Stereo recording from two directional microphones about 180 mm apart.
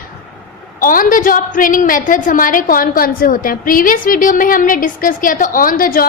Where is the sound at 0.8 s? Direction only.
50° left (ahead or behind).